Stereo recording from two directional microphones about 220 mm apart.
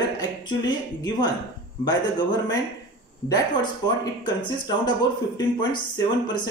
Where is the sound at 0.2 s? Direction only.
20° left (ahead or behind).